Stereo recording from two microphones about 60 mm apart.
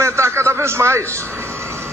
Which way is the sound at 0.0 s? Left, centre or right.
Right.